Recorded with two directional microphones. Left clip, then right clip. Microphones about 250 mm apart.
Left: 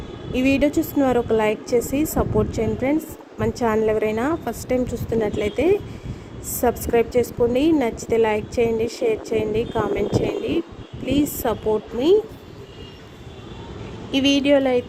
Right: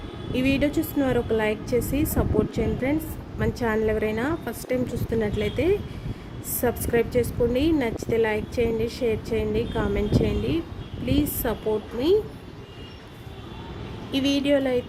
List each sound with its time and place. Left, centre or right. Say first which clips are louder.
0.3 s a woman's voice: left 4 dB; centre
6.9 s a woman's voice: left 3 dB; centre
14.1 s a woman's voice: left 5 dB; centre